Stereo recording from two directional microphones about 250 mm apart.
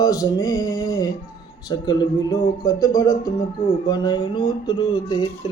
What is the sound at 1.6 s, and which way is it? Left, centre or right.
A man's voice, centre.